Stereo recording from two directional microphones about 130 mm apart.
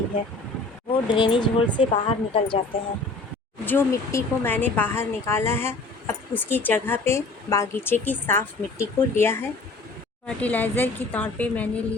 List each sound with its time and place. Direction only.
0.9 s speech: 40° left (ahead or behind)
3.7 s speech: 15° left (ahead or behind)